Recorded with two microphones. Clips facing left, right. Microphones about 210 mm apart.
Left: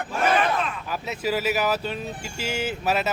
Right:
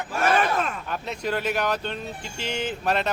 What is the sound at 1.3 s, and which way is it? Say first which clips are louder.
Speech: left 2 dB; 5° left (ahead or behind).